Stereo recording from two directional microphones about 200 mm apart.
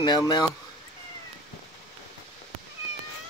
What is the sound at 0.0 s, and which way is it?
Speech, 20° left (ahead or behind).